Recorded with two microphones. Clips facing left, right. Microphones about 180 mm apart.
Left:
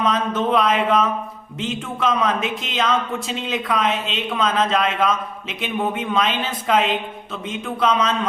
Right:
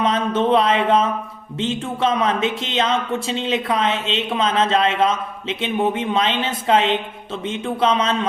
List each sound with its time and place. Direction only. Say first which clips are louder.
0.0 s speech: right 2 dB; 30° right (ahead or behind)